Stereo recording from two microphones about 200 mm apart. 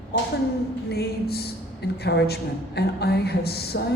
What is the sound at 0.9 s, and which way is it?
A woman's voice, 50° left (ahead or behind).